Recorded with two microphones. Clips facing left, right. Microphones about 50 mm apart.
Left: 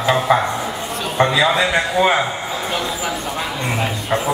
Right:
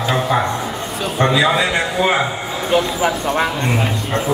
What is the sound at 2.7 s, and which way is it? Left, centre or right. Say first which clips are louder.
Speech: right 9 dB; centre.